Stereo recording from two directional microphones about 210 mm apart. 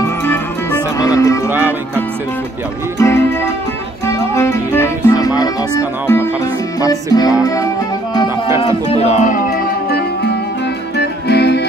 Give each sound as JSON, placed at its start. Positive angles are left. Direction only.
{"t": 0.2, "sound": "music", "side_deg": 10}
{"t": 3.0, "sound": "music", "side_deg": 10}
{"t": 8.5, "sound": "a sound", "side_deg": 30}
{"t": 9.3, "sound": "music", "side_deg": 45}